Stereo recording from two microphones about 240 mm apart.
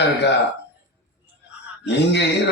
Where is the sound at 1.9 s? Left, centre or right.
Left.